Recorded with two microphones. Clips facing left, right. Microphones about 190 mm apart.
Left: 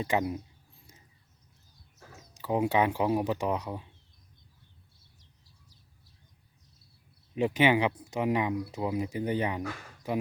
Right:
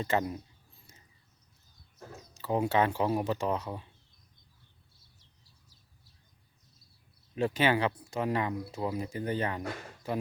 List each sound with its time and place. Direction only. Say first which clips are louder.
0.0 s speech: left 1 dB; 10° left (ahead or behind)
2.3 s speech: left 1 dB; 15° left (ahead or behind)
7.3 s speech: left 3 dB; 15° left (ahead or behind)